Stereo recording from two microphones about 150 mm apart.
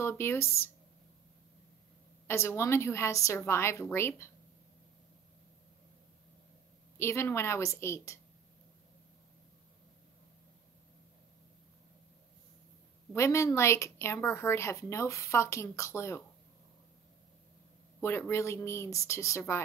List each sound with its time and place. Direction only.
0.0 s a woman's voice: 15° left (ahead or behind)
2.2 s a woman's voice: 15° left (ahead or behind)
7.0 s a woman's voice: 15° left (ahead or behind)
13.1 s a woman's voice: 20° left (ahead or behind)
18.0 s a woman's voice: 15° left (ahead or behind)